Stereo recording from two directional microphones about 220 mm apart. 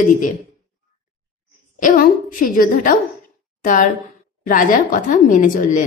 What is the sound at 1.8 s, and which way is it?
A woman's voice, 35° left (ahead or behind).